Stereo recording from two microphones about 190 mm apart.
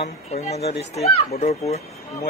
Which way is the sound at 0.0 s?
35° left (ahead or behind).